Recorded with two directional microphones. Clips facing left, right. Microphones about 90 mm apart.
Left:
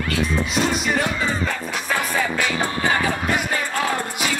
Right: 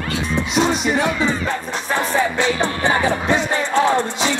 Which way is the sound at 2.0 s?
25° right (ahead or behind).